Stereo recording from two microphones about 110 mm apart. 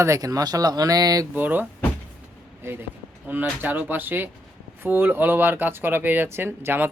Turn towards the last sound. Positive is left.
turn(degrees=-20)  # may be behind; listen again after turning